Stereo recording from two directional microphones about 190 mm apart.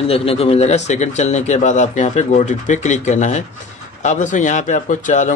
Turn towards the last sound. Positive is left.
turn(degrees=40)  # may be behind; listen again after turning